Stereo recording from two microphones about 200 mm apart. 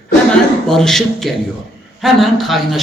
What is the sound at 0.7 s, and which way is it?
A woman's voice, centre (ahead or behind).